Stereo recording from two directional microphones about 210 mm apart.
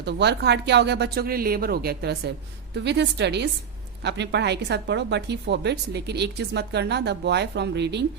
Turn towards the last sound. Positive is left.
turn(degrees=-55)  # may be behind; listen again after turning